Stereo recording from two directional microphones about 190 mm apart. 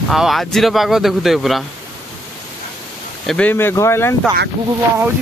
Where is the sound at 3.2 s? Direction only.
5° left (ahead or behind).